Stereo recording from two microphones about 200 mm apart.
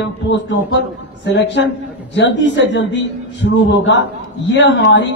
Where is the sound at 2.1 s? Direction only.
65° left (ahead or behind).